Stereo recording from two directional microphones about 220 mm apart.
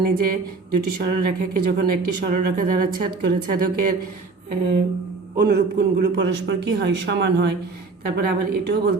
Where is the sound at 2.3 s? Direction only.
40° right (ahead or behind).